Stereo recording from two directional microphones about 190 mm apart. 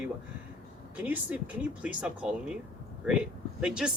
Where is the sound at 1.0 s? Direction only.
10° right (ahead or behind).